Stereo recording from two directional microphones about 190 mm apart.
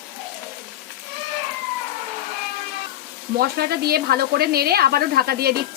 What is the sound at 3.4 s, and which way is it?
Speech, 55° right (ahead or behind).